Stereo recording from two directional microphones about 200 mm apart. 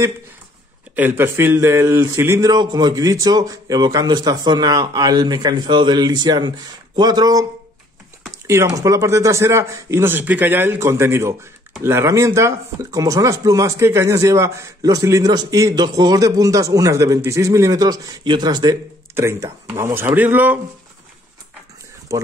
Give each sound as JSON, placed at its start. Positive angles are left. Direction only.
{"t": 0.9, "sound": "speech", "side_deg": -10}
{"t": 22.1, "sound": "speech", "side_deg": -15}